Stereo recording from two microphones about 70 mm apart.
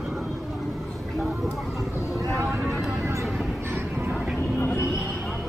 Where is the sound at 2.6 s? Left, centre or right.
Centre.